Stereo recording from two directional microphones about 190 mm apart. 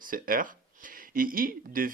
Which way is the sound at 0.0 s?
45° right (ahead or behind).